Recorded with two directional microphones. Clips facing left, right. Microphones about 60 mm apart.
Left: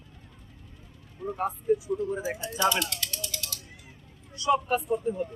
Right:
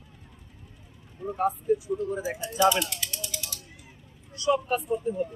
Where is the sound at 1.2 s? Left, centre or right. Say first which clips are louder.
Even; centre.